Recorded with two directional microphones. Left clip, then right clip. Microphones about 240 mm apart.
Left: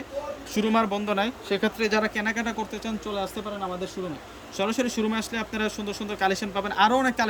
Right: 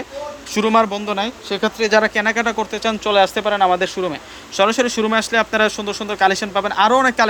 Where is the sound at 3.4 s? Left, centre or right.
Right.